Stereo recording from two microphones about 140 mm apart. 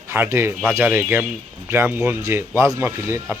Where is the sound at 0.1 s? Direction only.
20° right (ahead or behind).